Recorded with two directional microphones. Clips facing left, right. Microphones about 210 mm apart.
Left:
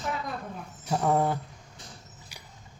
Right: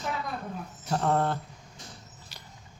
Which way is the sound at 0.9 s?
10° left (ahead or behind).